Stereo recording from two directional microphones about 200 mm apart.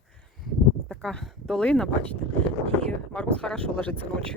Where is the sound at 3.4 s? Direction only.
5° left (ahead or behind).